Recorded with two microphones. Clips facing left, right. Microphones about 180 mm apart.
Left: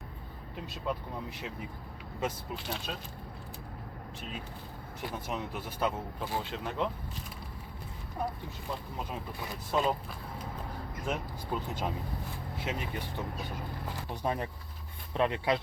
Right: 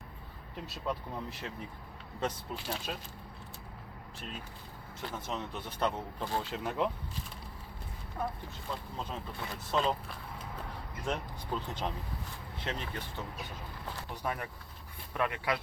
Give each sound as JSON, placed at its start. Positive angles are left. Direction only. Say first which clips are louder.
{"t": 0.9, "sound": "speech", "louder": "left 1 dB", "side_deg": 0}
{"t": 2.6, "sound": "speech", "louder": "right 1 dB", "side_deg": -5}
{"t": 4.9, "sound": "speech", "louder": "left 2 dB", "side_deg": 10}
{"t": 8.2, "sound": "speech", "louder": "left 1 dB", "side_deg": 15}
{"t": 11.0, "sound": "speech", "louder": "even", "side_deg": 5}
{"t": 14.3, "sound": "speech", "louder": "left 4 dB", "side_deg": 25}